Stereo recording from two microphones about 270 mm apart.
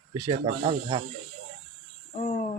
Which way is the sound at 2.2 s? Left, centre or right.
Left.